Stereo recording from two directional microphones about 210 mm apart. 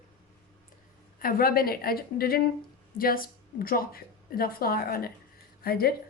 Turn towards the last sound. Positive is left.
turn(degrees=45)  # may be behind; listen again after turning